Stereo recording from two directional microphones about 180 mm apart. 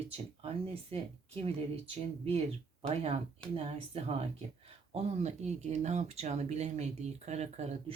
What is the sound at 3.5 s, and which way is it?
Speech, 35° right (ahead or behind).